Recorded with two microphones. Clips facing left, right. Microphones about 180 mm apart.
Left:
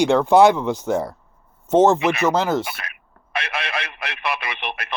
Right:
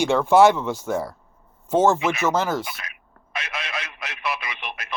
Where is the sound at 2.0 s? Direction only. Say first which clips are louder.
Left 3 dB; 60° left (ahead or behind).